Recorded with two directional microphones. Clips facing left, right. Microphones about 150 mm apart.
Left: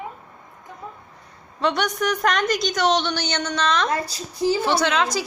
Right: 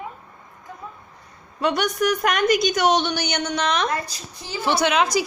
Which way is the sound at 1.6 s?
10° right (ahead or behind).